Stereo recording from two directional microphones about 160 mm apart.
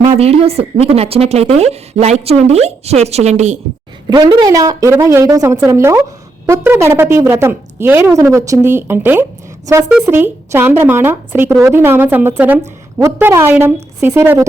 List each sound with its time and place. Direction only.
0.0 s a woman's voice: 40° right (ahead or behind)
4.1 s a woman's voice: 25° right (ahead or behind)